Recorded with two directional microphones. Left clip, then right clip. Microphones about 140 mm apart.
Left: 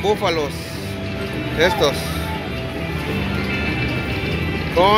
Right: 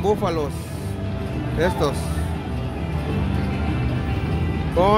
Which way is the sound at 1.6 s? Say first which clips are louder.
Left 5 dB; 35° right (ahead or behind).